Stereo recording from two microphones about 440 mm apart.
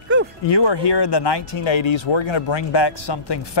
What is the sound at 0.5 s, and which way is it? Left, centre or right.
Speech, left.